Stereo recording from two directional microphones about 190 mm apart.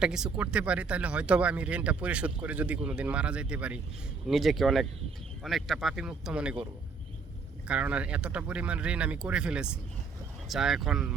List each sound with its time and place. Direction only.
0.0 s speech: 5° right (ahead or behind)
7.7 s speech: 5° right (ahead or behind)